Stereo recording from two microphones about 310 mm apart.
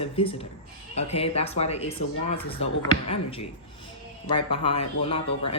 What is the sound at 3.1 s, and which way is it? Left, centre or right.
Speech, centre.